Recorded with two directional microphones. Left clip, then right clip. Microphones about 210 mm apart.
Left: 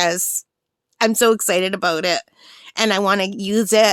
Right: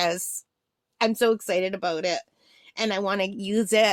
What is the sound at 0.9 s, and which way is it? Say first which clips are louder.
A woman's voice: left 6 dB; 30° left (ahead or behind).